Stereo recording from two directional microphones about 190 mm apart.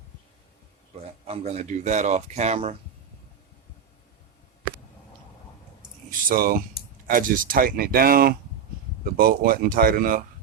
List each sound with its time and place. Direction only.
0.9 s speech: 35° right (ahead or behind)
6.1 s a sound: 50° right (ahead or behind)
7.1 s speech: 45° right (ahead or behind)